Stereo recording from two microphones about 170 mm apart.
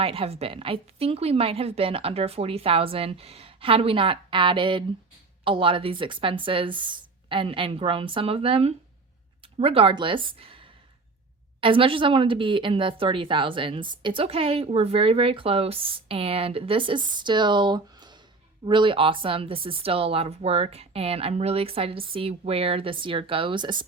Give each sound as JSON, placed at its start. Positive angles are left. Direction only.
{"t": 0.0, "sound": "a woman's voice", "side_deg": -35}
{"t": 11.6, "sound": "a woman's voice", "side_deg": -30}